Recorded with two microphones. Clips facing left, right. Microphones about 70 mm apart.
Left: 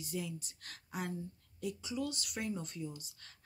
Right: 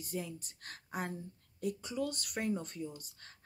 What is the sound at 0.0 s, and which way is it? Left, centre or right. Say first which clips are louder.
A woman's voice: even; right.